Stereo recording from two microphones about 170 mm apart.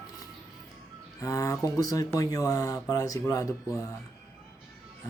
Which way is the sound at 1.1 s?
20° left (ahead or behind).